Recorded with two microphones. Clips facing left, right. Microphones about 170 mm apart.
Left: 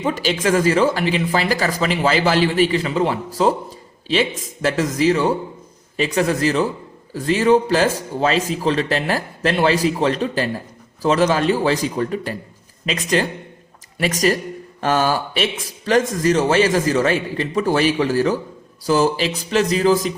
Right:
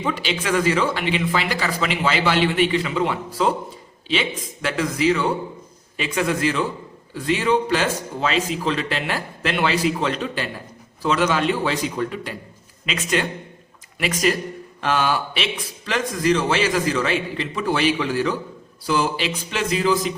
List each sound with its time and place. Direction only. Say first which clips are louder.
0.0 s speech: left 5 dB; 40° left (ahead or behind)